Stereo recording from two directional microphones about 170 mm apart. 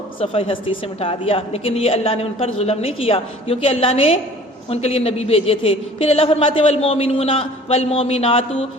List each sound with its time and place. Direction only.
0.2 s a woman's voice: 30° left (ahead or behind)